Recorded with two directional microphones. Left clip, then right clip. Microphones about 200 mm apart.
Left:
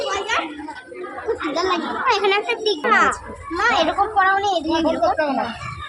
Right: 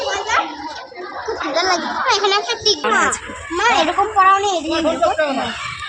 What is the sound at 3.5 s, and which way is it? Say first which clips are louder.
Speech: right 3 dB; 35° right (ahead or behind).